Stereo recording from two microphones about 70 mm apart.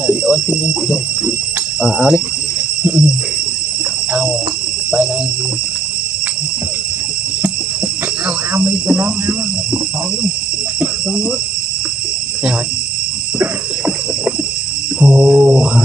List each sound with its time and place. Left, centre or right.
0.0 s speech: centre
1.8 s mantra: centre
8.5 s speech: centre
13.4 s a sound: centre
15.0 s mantra: centre